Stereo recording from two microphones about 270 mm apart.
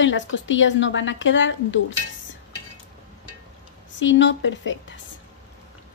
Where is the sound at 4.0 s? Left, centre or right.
Left.